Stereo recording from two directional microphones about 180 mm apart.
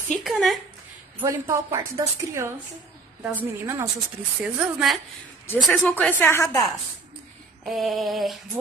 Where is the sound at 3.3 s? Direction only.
15° right (ahead or behind).